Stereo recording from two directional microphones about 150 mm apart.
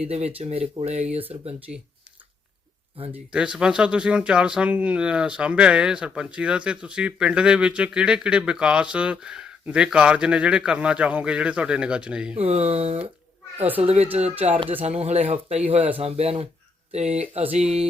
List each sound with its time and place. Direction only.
0.0 s speech: 45° right (ahead or behind)
3.3 s speech: 5° right (ahead or behind)
12.4 s speech: 45° right (ahead or behind)